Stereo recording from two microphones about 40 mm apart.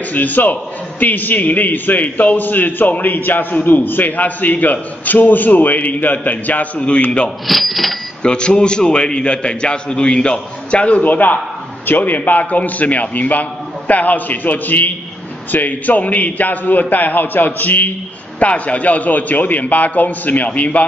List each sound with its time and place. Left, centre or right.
0.1 s a man's voice: left
7.4 s speech: centre
8.2 s a man's voice: left
11.1 s a man's voice: left
18.4 s a man's voice: left